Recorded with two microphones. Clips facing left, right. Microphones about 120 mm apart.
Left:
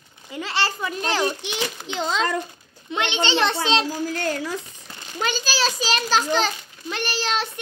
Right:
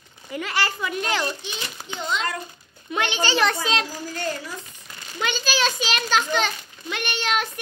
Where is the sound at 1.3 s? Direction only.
70° left (ahead or behind).